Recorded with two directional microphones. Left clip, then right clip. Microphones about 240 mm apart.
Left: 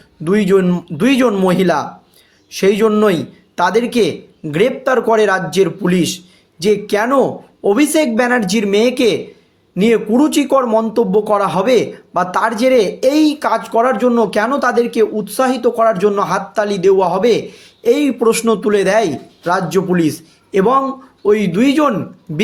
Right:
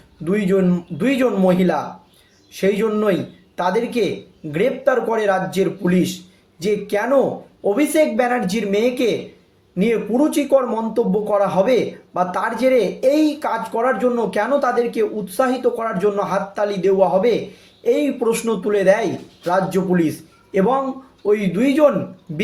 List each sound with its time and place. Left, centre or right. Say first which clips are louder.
0.3 s speech: left 5 dB; left